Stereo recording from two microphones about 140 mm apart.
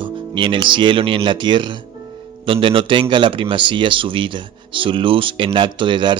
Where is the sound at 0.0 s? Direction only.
35° right (ahead or behind).